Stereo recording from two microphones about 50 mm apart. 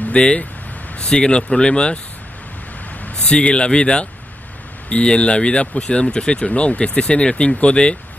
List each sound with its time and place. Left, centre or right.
0.1 s speech: left
3.3 s speech: centre